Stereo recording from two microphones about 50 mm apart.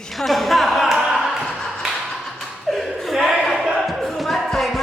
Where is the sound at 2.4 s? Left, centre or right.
Centre.